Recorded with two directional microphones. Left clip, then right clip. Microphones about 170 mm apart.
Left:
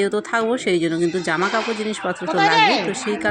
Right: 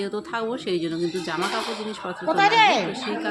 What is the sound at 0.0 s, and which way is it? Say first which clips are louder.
Speech: left 8 dB; 35° left (ahead or behind).